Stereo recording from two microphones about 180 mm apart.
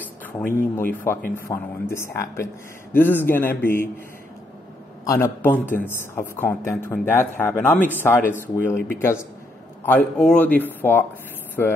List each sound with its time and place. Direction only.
0.7 s a man's voice: 15° left (ahead or behind)
5.0 s a man's voice: 15° left (ahead or behind)